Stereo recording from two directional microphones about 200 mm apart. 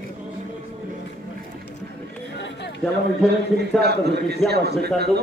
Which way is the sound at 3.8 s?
55° right (ahead or behind).